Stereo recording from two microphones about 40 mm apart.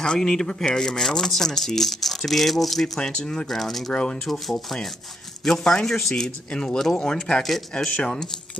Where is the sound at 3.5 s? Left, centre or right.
Centre.